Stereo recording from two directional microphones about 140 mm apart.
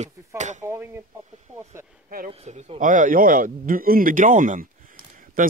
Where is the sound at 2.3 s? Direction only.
50° right (ahead or behind); by 5.4 s 75° right (ahead or behind).